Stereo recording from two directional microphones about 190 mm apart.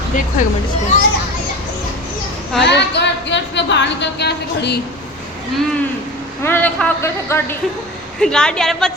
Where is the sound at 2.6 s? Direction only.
65° left (ahead or behind).